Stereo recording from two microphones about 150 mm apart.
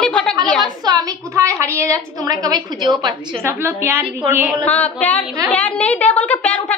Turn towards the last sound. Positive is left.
turn(degrees=10)  # may be behind; listen again after turning